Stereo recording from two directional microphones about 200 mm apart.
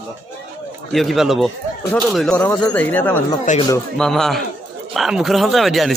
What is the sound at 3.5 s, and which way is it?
Speech, 40° left (ahead or behind).